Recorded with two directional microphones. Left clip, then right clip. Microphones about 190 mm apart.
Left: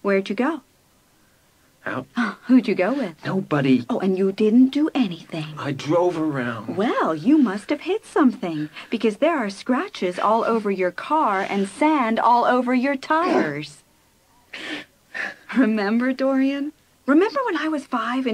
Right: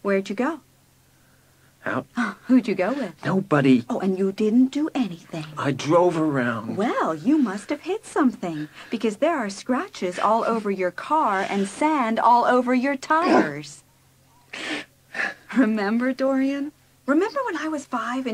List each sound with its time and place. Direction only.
0.0 s speech: 60° right (ahead or behind)
1.8 s speech: 50° right (ahead or behind)